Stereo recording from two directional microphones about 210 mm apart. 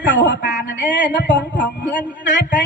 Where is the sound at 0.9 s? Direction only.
60° left (ahead or behind).